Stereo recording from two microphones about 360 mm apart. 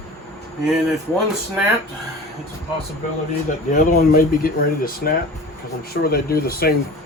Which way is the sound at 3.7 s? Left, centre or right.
Left.